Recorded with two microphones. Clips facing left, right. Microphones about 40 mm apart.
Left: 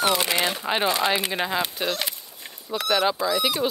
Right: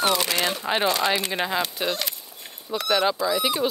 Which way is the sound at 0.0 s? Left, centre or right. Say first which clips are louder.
Even; left.